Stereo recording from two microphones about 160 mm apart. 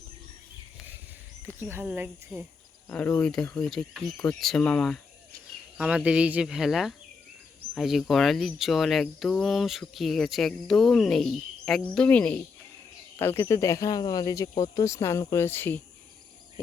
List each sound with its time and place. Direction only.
1.5 s speech: 15° right (ahead or behind)
2.9 s speech: 10° left (ahead or behind)
5.7 s speech: 5° right (ahead or behind); by 15.8 s 15° left (ahead or behind)